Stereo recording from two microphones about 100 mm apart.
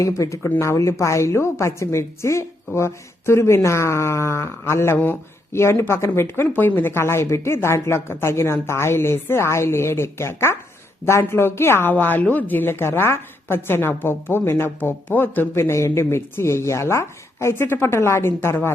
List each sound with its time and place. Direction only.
0.0 s speech: 30° left (ahead or behind)